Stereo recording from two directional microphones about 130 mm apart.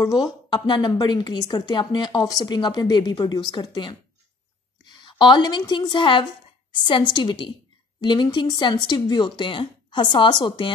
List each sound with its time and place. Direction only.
0.0 s speech: 35° left (ahead or behind)
5.2 s speech: 35° left (ahead or behind)